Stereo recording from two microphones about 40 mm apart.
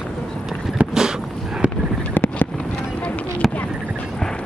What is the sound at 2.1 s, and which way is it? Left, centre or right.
Fireworks, left.